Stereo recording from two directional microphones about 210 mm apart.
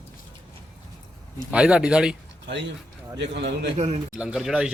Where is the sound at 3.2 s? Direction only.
55° right (ahead or behind).